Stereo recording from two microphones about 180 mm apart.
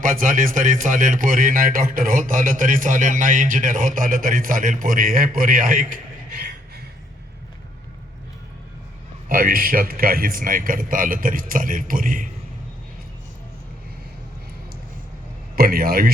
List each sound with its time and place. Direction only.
0.0 s speech: 50° right (ahead or behind)
9.3 s speech: 55° right (ahead or behind)
15.5 s a man's voice: 55° right (ahead or behind)